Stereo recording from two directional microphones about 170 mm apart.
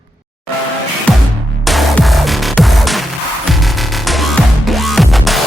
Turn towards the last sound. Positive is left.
turn(degrees=0)  # may be behind; listen again after turning